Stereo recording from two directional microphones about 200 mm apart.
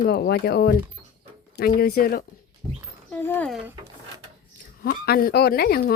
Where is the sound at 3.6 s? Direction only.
15° right (ahead or behind).